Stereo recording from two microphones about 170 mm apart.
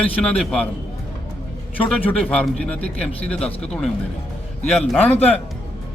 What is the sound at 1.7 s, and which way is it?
A man's voice, 10° left (ahead or behind).